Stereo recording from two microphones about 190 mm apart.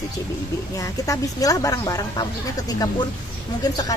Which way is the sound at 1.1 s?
20° left (ahead or behind).